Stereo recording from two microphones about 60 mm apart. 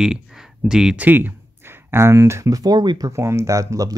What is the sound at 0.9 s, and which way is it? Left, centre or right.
Speech, right.